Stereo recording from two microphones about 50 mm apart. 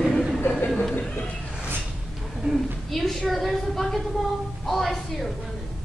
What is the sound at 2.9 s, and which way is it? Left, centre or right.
A woman's voice, centre.